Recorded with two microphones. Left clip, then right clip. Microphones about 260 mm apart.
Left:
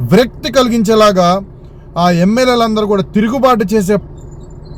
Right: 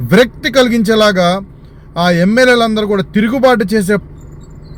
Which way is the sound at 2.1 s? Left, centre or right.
Left.